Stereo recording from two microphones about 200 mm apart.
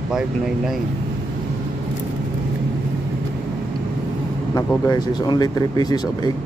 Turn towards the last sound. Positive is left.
turn(degrees=20)  # may be behind; listen again after turning